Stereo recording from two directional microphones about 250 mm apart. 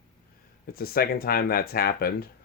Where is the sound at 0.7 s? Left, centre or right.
Left.